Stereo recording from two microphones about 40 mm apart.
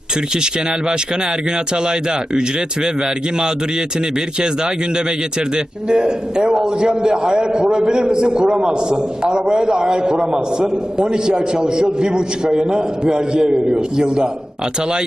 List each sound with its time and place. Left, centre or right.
0.3 s a man's voice: centre
4.4 s a man's voice: right